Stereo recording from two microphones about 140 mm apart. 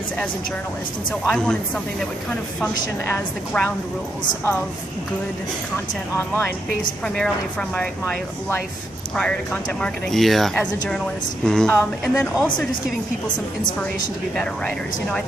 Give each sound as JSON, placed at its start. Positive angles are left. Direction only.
{"t": 1.2, "sound": "speech", "side_deg": 5}
{"t": 3.1, "sound": "speech", "side_deg": 10}
{"t": 6.1, "sound": "speech", "side_deg": 15}
{"t": 7.7, "sound": "speech", "side_deg": 10}
{"t": 14.3, "sound": "speech", "side_deg": 5}